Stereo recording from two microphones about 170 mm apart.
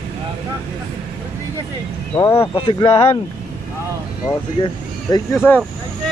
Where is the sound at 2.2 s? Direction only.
20° left (ahead or behind).